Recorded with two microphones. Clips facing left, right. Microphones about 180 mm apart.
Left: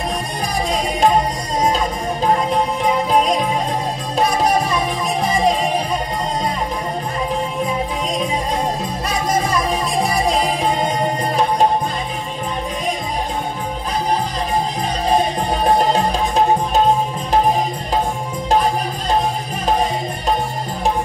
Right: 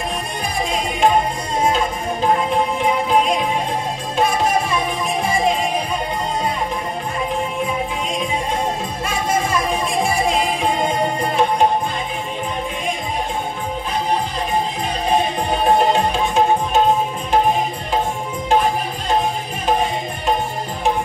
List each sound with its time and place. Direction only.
0.4 s music: 35° left (ahead or behind)
4.2 s music: 40° left (ahead or behind)
9.0 s music: 40° left (ahead or behind)
15.0 s music: 35° left (ahead or behind)